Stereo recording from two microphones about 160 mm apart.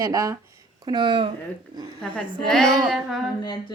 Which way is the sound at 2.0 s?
5° left (ahead or behind).